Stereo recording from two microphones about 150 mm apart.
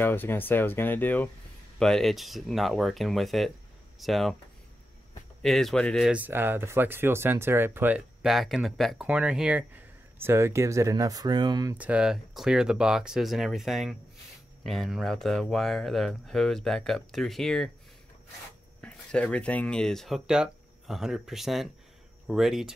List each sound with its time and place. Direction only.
0.0 s speech: 15° left (ahead or behind)
5.4 s speech: centre (ahead or behind)
6.1 s speech: 15° right (ahead or behind)
10.2 s speech: 20° right (ahead or behind)
11.7 s speech: 10° right (ahead or behind)
18.8 s speech: 10° left (ahead or behind)